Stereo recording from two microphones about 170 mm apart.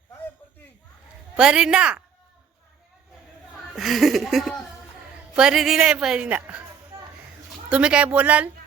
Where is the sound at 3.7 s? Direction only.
Centre (ahead or behind).